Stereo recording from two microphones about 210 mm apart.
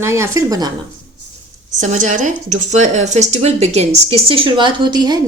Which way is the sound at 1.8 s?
35° right (ahead or behind).